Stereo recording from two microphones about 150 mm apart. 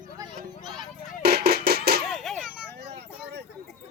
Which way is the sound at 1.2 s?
90° right.